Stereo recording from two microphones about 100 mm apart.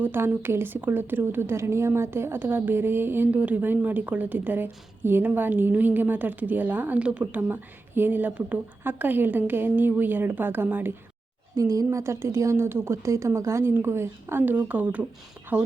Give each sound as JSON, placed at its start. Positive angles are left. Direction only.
{"t": 0.0, "sound": "a woman's voice", "side_deg": -20}
{"t": 11.5, "sound": "a woman's voice", "side_deg": -35}